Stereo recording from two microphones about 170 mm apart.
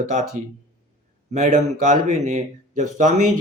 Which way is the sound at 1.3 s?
45° right (ahead or behind).